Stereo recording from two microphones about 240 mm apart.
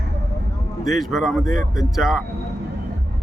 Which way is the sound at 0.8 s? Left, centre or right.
Centre.